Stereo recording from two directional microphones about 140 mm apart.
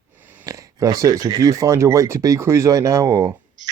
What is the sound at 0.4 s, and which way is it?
Speech, 25° right (ahead or behind).